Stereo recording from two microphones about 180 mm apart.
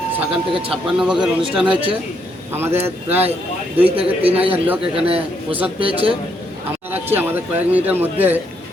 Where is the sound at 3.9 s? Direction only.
30° right (ahead or behind).